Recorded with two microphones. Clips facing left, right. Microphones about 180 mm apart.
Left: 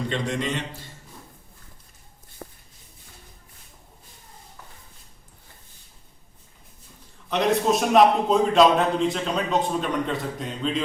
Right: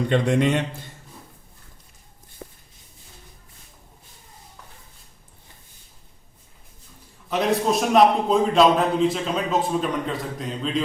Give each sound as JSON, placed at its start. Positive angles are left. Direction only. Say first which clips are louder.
{"t": 0.1, "sound": "a man's voice", "louder": "right 7 dB", "side_deg": -60}
{"t": 7.3, "sound": "a man's voice", "louder": "even", "side_deg": 0}